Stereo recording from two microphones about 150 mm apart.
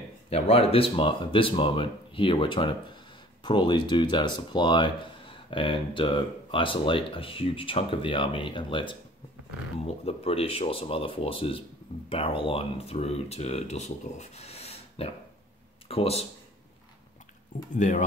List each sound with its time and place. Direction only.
0.3 s speech: 40° left (ahead or behind)
17.7 s speech: 55° left (ahead or behind)